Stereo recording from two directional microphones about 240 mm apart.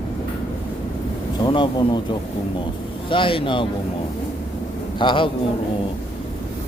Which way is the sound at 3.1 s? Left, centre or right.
Left.